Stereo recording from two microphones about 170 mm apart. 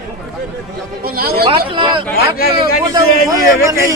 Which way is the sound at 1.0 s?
60° right (ahead or behind).